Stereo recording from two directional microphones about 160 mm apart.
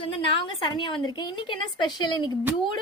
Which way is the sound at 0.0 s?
30° left (ahead or behind).